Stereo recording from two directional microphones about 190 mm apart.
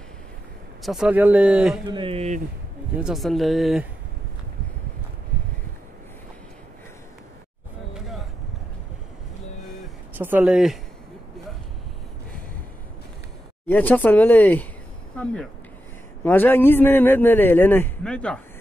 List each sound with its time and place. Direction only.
0.8 s speech: 5° right (ahead or behind)
1.9 s speech: 25° right (ahead or behind)
3.0 s speech: centre (ahead or behind)
10.1 s speech: 10° right (ahead or behind)
13.7 s a man's voice: 10° left (ahead or behind)